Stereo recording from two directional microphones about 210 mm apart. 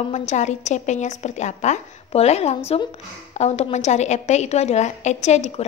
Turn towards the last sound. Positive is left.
turn(degrees=30)  # may be behind; listen again after turning